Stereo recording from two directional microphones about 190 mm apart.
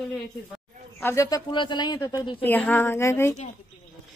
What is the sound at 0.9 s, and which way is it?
A man's voice, 15° left (ahead or behind).